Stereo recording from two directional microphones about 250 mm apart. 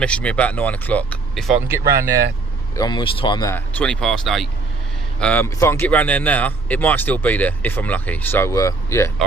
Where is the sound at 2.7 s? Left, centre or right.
Centre.